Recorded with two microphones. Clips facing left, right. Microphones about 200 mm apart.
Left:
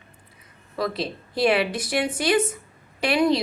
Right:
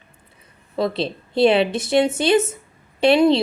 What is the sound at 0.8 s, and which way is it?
A woman's voice, 25° right (ahead or behind).